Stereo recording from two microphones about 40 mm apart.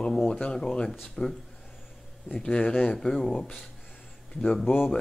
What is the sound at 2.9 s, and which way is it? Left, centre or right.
Speech, centre.